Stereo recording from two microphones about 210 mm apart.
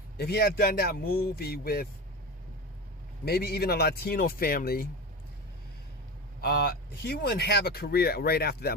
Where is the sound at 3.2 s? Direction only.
50° left (ahead or behind).